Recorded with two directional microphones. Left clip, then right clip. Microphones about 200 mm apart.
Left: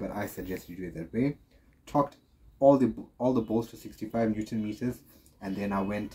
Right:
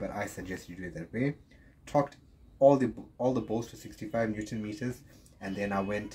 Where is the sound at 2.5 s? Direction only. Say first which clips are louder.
Left 1 dB; 25° right (ahead or behind).